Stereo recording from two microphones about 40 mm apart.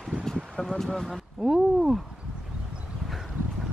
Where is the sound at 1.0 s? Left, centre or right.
Centre.